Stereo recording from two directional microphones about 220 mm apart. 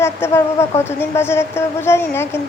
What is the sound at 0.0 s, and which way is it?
A woman's voice, 10° left (ahead or behind).